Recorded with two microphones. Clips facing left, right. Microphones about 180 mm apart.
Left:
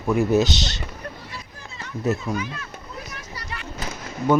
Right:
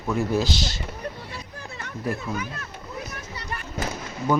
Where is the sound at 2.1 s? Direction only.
25° left (ahead or behind).